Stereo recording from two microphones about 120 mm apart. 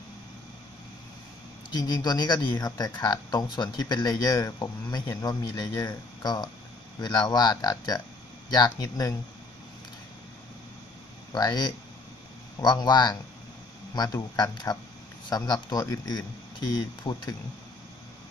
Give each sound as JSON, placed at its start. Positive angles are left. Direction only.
{"t": 1.7, "sound": "speech", "side_deg": 35}
{"t": 11.3, "sound": "speech", "side_deg": 35}